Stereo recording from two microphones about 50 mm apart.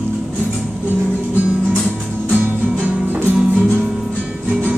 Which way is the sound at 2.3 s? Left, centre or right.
Right.